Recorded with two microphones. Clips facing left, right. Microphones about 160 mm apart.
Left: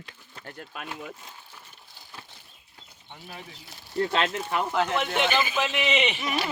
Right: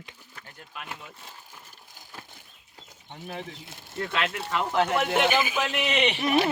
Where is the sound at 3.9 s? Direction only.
30° left (ahead or behind).